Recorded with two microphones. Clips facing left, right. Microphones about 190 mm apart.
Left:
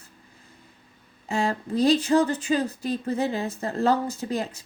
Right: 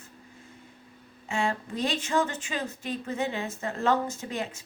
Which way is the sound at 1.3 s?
35° left (ahead or behind).